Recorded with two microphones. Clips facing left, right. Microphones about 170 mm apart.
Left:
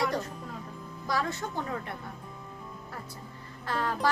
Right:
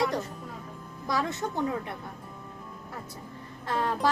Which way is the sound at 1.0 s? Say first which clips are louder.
Right 2 dB; 20° right (ahead or behind).